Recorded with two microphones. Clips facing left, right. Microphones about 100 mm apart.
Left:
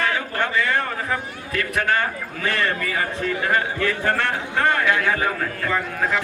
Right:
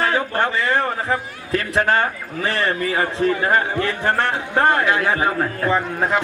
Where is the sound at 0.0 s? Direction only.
35° right (ahead or behind).